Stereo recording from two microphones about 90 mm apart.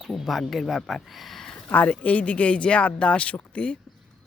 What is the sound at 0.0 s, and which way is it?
Speech, centre (ahead or behind).